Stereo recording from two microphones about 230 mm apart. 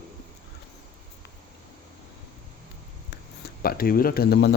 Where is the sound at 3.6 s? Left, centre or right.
Left.